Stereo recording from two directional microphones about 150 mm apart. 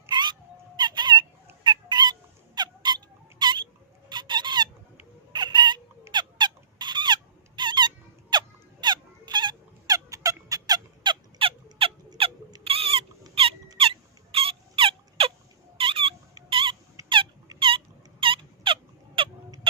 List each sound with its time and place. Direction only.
0.1 s a sound: 30° right (ahead or behind)
1.6 s bird: 30° right (ahead or behind)
4.1 s a sound: 30° right (ahead or behind)
5.3 s chicken: 30° right (ahead or behind)
6.1 s squeak: 30° right (ahead or behind)
12.6 s rodents: 40° right (ahead or behind)
13.7 s a sound: 40° right (ahead or behind)
16.4 s rodents: 35° right (ahead or behind)
17.6 s fowl: 35° right (ahead or behind)